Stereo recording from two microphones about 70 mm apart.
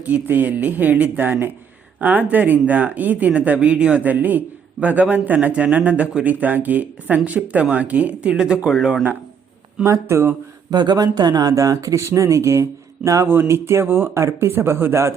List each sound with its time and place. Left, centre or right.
0.0 s speech: right; by 9.0 s centre
9.8 s speech: right
10.7 s speech: right
13.2 s speech: right